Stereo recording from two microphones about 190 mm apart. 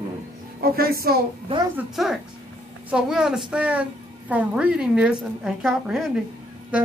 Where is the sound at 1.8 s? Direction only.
Centre (ahead or behind).